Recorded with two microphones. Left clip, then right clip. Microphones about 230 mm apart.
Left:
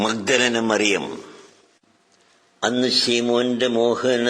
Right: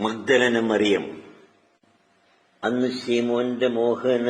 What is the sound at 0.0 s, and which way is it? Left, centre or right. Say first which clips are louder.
Mantra: left 1 dB; left.